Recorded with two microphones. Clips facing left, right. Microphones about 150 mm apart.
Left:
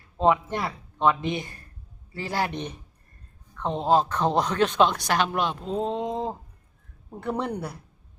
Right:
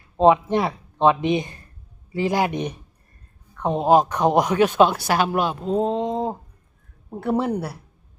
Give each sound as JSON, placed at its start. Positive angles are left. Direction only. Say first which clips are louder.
{"t": 0.2, "sound": "a woman's voice", "louder": "right 6 dB", "side_deg": -20}
{"t": 5.8, "sound": "a sound", "louder": "right 3 dB", "side_deg": 0}
{"t": 7.2, "sound": "a woman's voice", "louder": "right 6 dB", "side_deg": -5}